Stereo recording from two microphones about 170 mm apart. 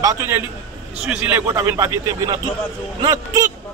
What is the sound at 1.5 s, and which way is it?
Speech, 20° right (ahead or behind).